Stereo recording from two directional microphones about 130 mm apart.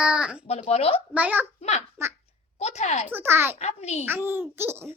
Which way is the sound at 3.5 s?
55° left (ahead or behind).